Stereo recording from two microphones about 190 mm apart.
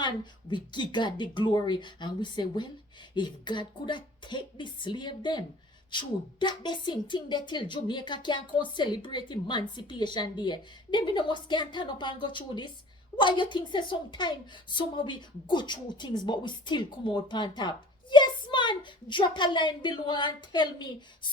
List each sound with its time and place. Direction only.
0.5 s a woman's voice: 25° left (ahead or behind)